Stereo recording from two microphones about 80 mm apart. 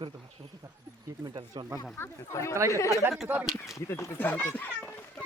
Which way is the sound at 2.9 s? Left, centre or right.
Right.